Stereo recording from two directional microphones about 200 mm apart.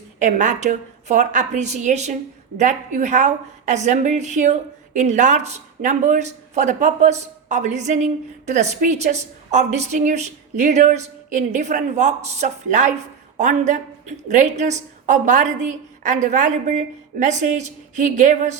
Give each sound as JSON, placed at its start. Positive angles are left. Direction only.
{"t": 0.2, "sound": "speech", "side_deg": -35}